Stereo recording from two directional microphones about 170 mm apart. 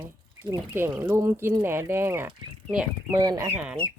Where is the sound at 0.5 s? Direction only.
15° right (ahead or behind).